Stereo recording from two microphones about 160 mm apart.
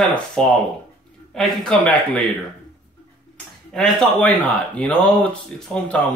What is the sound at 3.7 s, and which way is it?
A man's voice, 5° left (ahead or behind).